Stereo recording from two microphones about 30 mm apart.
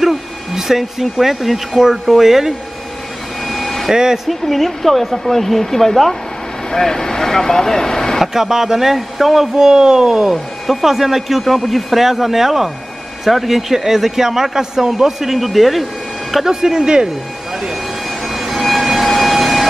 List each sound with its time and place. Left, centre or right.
0.0 s speech: centre
3.4 s vacuum cleaner: centre
3.9 s speech: right
4.3 s speech: centre
8.3 s speech: centre
10.7 s speech: centre
15.2 s speech: centre
16.4 s speech: right
18.2 s vehicle: centre